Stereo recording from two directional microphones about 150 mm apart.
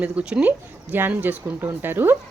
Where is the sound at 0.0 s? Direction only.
5° right (ahead or behind).